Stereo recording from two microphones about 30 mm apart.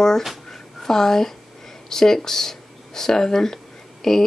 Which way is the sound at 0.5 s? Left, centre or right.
Centre.